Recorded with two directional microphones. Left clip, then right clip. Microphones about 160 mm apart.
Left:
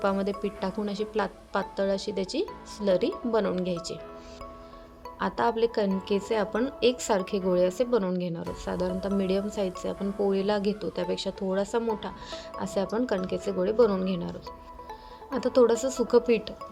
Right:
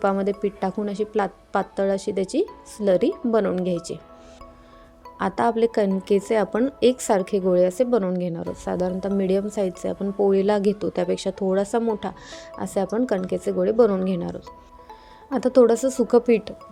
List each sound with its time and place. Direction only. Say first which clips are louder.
0.0 s speech: right 5 dB; 40° right (ahead or behind)
5.2 s speech: right 5 dB; 45° right (ahead or behind)